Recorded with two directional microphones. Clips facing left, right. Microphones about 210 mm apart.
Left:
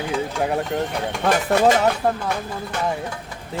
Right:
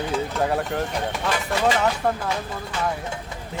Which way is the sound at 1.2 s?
50° left (ahead or behind).